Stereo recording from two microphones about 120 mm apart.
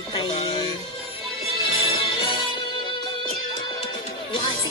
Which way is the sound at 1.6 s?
45° left (ahead or behind).